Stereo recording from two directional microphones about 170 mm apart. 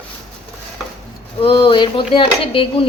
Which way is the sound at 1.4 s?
30° left (ahead or behind).